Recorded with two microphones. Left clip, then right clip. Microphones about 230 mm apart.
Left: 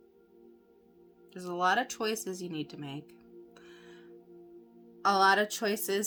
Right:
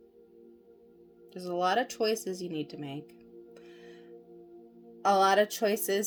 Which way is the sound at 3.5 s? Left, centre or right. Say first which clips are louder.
Right 2 dB; centre.